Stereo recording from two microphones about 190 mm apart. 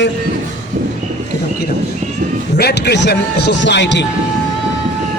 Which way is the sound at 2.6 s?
60° left (ahead or behind).